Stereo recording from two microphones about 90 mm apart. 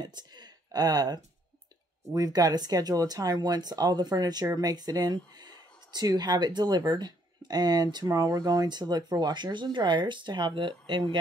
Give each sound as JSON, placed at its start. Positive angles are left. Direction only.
{"t": 0.0, "sound": "speech", "side_deg": -50}